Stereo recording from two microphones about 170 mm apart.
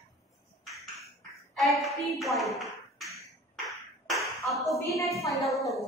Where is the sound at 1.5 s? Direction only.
Centre (ahead or behind).